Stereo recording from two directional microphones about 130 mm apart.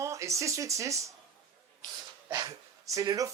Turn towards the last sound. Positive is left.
turn(degrees=-25)  # may be behind; listen again after turning